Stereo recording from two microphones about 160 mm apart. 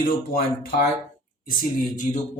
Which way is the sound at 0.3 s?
70° left (ahead or behind).